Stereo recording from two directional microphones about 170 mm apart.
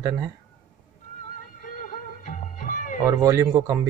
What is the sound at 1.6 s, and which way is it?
Music, 50° left (ahead or behind).